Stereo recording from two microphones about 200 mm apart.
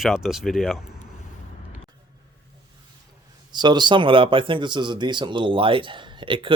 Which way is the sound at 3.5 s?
20° right (ahead or behind).